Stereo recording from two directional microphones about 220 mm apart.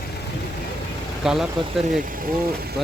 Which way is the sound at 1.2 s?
Centre (ahead or behind).